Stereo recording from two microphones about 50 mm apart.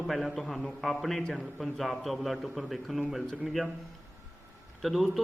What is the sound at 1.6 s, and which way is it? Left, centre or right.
A man's voice, centre.